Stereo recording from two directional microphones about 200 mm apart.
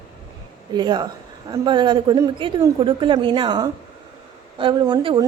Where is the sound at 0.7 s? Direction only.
20° right (ahead or behind).